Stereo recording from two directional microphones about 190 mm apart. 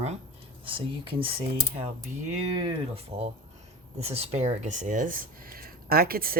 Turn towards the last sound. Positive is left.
turn(degrees=-50)  # may be behind; listen again after turning